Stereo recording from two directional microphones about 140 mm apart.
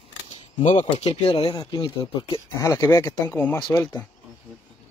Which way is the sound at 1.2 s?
40° left (ahead or behind).